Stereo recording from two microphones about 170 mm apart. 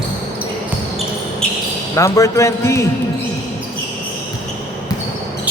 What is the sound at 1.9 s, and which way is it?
Speech, 20° left (ahead or behind).